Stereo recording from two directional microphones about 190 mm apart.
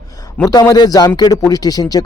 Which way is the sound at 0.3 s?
15° left (ahead or behind).